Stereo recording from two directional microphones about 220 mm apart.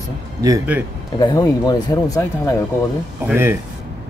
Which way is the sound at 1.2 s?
15° left (ahead or behind).